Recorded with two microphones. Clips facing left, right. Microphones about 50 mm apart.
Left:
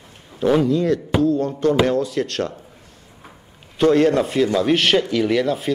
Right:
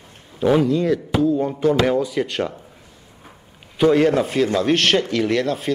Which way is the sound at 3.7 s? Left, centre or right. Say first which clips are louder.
Even; centre.